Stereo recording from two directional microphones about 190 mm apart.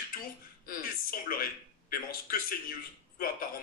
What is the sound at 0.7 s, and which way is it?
A man's voice, 50° left (ahead or behind).